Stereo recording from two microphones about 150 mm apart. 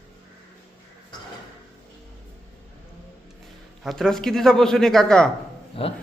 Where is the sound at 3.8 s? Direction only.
5° left (ahead or behind).